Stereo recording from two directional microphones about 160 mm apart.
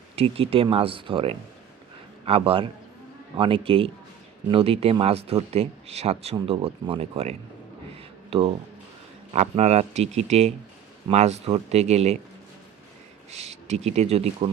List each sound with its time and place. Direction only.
0.2 s speech: 35° right (ahead or behind)
13.3 s speech: 45° right (ahead or behind)